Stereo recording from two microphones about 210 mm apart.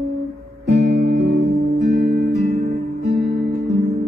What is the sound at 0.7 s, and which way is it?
Music, 35° right (ahead or behind).